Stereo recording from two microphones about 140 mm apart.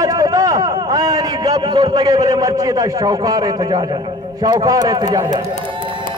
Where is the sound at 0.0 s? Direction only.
25° right (ahead or behind).